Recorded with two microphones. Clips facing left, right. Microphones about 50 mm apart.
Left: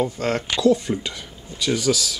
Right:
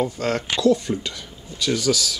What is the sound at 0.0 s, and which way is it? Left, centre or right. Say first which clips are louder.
Speech: even; centre.